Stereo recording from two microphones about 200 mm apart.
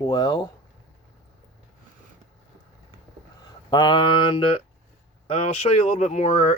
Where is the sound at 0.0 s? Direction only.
20° left (ahead or behind).